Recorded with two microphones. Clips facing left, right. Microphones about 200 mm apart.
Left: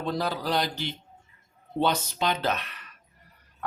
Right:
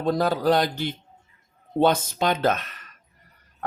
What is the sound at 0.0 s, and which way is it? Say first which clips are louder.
Speech: right 7 dB; 45° right (ahead or behind).